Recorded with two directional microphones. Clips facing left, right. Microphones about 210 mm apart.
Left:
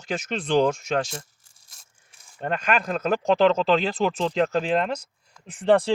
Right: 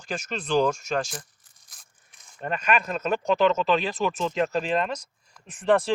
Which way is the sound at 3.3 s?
30° left (ahead or behind).